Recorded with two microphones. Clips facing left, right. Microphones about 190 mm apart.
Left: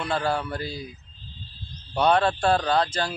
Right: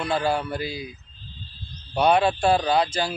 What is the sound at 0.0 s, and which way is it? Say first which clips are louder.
Speech: right 2 dB; 10° right (ahead or behind).